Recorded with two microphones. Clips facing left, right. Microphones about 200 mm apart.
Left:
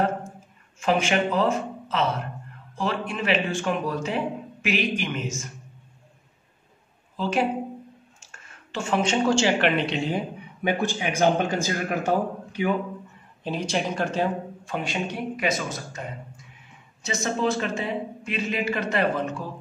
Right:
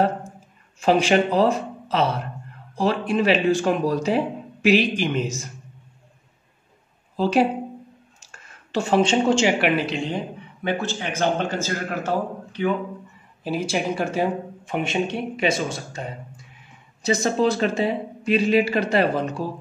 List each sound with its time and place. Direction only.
0.7 s a man's voice: 35° right (ahead or behind)
7.2 s speech: 35° right (ahead or behind)
8.7 s speech: 35° right (ahead or behind); by 10.2 s centre (ahead or behind)
10.6 s a man's voice: 15° left (ahead or behind)
13.4 s a man's voice: 5° right (ahead or behind); by 19.4 s 35° right (ahead or behind)